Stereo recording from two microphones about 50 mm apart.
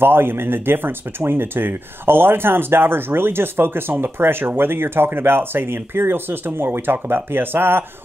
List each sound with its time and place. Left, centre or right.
0.0 s speech: right